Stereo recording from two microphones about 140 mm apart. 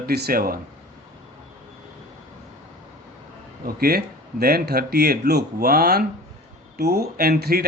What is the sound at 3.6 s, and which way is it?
Speech, 90° right.